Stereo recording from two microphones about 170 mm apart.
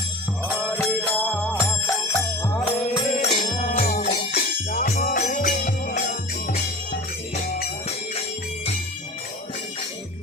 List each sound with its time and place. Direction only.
0.8 s music: 10° left (ahead or behind)
2.9 s music: 35° left (ahead or behind)
3.5 s music: 50° left (ahead or behind)